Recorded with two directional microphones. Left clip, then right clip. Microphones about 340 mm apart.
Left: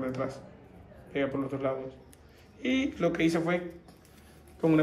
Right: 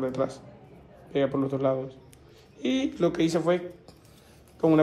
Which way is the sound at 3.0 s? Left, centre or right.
Centre.